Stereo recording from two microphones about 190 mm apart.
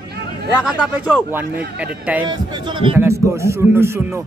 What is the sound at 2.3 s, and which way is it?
Speech, 25° right (ahead or behind).